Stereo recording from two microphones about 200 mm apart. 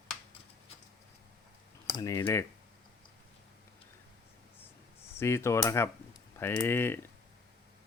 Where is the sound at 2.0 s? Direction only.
15° left (ahead or behind).